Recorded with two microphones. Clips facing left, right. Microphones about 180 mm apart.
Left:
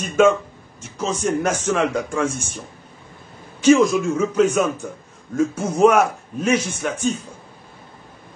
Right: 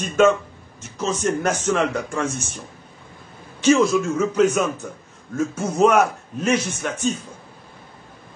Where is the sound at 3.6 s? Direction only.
15° left (ahead or behind).